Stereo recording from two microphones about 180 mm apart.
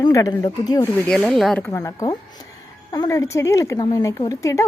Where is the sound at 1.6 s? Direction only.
15° left (ahead or behind).